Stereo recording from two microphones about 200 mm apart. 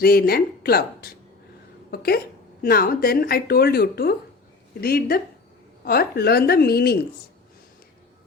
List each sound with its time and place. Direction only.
0.0 s a woman's voice: 50° left (ahead or behind)